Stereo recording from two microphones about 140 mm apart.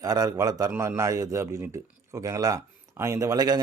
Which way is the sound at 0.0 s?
25° right (ahead or behind).